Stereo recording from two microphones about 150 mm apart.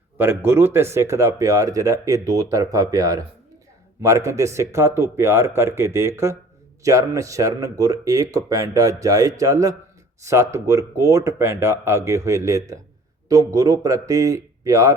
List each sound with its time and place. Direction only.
0.2 s speech: 15° right (ahead or behind)